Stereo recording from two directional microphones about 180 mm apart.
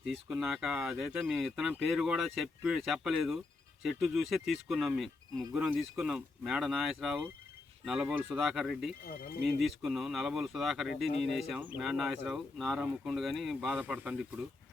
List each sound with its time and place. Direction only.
0.3 s speech: centre (ahead or behind)
9.0 s speech: 55° left (ahead or behind)
9.4 s speech: centre (ahead or behind)